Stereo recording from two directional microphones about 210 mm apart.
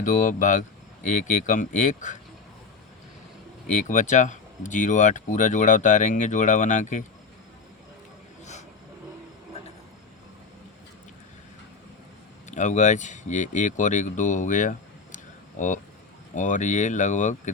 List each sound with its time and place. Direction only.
0.0 s speech: 40° left (ahead or behind)
3.7 s speech: 35° left (ahead or behind)
12.5 s speech: 35° left (ahead or behind)